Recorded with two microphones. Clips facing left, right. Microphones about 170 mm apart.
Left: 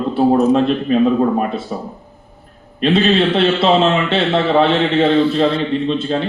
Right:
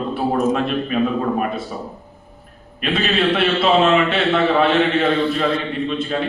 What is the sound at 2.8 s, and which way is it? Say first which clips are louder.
A man's voice: left 6 dB; 30° left (ahead or behind).